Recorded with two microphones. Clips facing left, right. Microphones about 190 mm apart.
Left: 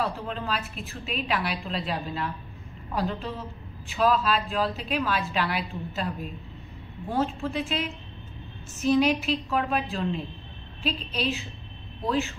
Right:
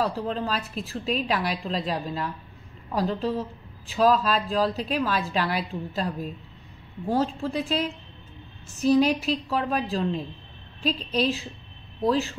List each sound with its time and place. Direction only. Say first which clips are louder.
0.0 s a woman's voice: right 4 dB; 35° right (ahead or behind)
7.1 s a woman's voice: right 2 dB; 40° right (ahead or behind)